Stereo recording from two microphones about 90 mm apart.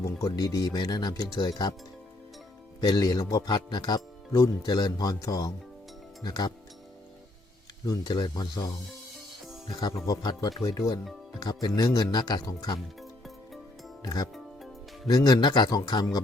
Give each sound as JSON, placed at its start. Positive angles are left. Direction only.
{"t": 0.0, "sound": "speech", "side_deg": 40}
{"t": 2.8, "sound": "speech", "side_deg": 50}
{"t": 7.9, "sound": "speech", "side_deg": 55}
{"t": 10.1, "sound": "speech", "side_deg": 50}
{"t": 13.0, "sound": "music", "side_deg": 0}
{"t": 14.0, "sound": "speech", "side_deg": 40}